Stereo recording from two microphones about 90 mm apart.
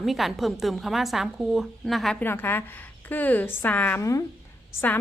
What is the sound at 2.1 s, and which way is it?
A woman's voice, 20° left (ahead or behind).